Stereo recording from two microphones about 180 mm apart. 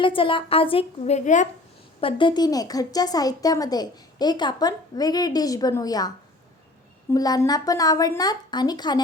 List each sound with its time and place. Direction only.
0.0 s a woman's voice: 30° left (ahead or behind)
2.0 s speech: 30° left (ahead or behind)
7.1 s speech: 20° left (ahead or behind)